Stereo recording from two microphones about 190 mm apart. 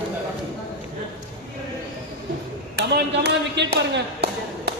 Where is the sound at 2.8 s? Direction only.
60° right (ahead or behind).